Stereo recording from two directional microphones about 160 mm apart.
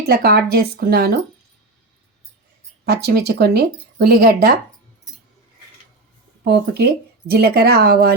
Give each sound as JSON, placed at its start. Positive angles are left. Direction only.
{"t": 0.0, "sound": "speech", "side_deg": -80}
{"t": 2.8, "sound": "speech", "side_deg": -90}
{"t": 6.4, "sound": "speech", "side_deg": -90}